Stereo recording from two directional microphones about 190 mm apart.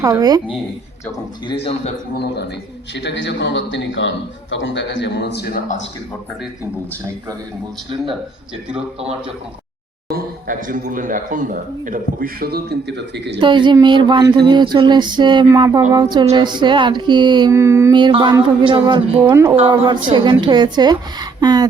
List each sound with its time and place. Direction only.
0.0 s music: 20° right (ahead or behind)
1.5 s a man's voice: 30° left (ahead or behind)
2.1 s a man's voice: 60° left (ahead or behind)
10.1 s speech: 50° right (ahead or behind)
13.1 s a woman's voice: 65° right (ahead or behind)
13.4 s music: 25° right (ahead or behind)
17.9 s music: 25° right (ahead or behind)
19.2 s speech: 15° right (ahead or behind)
19.5 s music: 25° right (ahead or behind)